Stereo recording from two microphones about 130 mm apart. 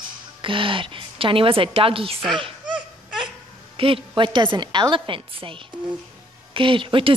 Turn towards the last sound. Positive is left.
turn(degrees=-40)  # may be behind; listen again after turning